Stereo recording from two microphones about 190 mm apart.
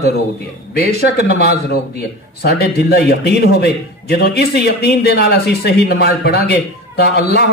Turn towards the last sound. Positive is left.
turn(degrees=55)  # may be behind; listen again after turning